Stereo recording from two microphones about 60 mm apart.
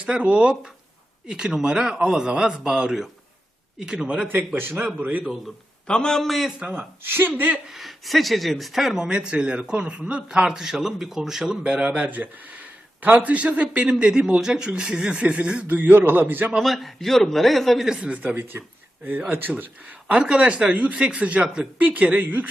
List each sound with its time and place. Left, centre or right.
0.0 s a man's voice: right
4.3 s a man's voice: right
4.9 s speech: right
5.9 s a man's voice: centre
6.7 s a man's voice: right
7.7 s a man's voice: centre
9.0 s a man's voice: centre
15.6 s a man's voice: right
16.6 s a man's voice: centre
17.8 s speech: centre
18.3 s a man's voice: right
20.1 s speech: centre